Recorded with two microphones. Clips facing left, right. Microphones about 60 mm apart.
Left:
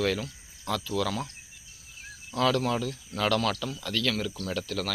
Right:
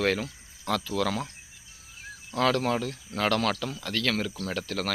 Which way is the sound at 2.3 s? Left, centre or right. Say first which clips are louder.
Right 1 dB; right.